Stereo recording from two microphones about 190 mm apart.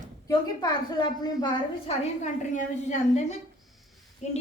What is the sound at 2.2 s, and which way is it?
A woman's voice, 40° left (ahead or behind).